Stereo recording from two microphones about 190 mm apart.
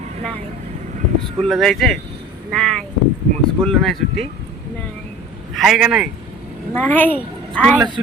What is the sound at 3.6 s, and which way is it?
Speech, 5° left (ahead or behind).